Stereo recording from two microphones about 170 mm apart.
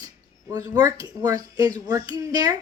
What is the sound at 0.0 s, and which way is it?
A woman's voice, 20° right (ahead or behind).